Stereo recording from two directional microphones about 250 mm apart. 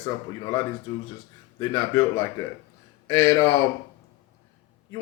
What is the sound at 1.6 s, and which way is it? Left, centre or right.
Speech, centre.